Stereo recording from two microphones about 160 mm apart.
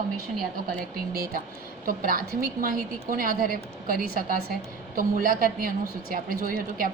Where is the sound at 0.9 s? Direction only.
70° right (ahead or behind).